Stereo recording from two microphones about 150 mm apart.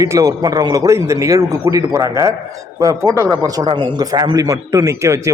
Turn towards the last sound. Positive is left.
turn(degrees=-20)  # may be behind; listen again after turning